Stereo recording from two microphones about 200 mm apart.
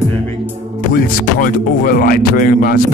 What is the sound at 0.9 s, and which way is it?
Speech, 45° left (ahead or behind).